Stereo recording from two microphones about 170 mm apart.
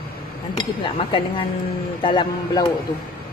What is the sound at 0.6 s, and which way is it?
Speech, 30° left (ahead or behind).